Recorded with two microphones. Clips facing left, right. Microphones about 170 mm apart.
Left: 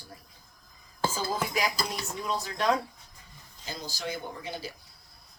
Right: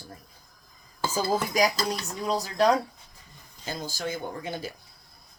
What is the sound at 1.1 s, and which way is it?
A woman's voice, 40° right (ahead or behind).